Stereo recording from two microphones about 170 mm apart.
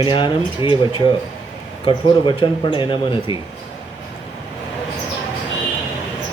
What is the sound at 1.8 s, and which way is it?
Speech, 30° left (ahead or behind).